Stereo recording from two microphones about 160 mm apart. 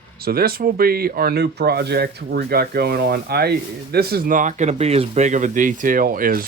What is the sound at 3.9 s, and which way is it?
Speech, 70° right (ahead or behind).